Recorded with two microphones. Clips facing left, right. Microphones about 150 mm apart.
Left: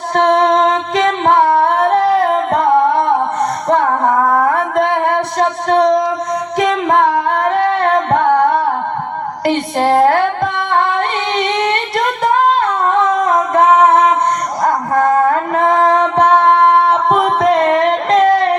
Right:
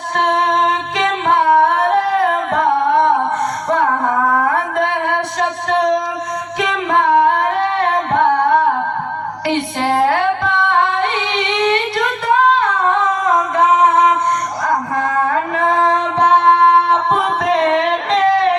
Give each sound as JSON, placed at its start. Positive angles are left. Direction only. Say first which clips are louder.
{"t": 0.1, "sound": "music", "louder": "left 5 dB", "side_deg": 45}
{"t": 3.7, "sound": "a sound", "louder": "left 3 dB", "side_deg": 40}
{"t": 6.6, "sound": "singing", "louder": "left 4 dB", "side_deg": 45}
{"t": 9.5, "sound": "music", "louder": "left 4 dB", "side_deg": 45}
{"t": 11.3, "sound": "singing", "louder": "even", "side_deg": 45}
{"t": 14.6, "sound": "a sound", "louder": "left 7 dB", "side_deg": 45}
{"t": 17.2, "sound": "music", "louder": "left 4 dB", "side_deg": 45}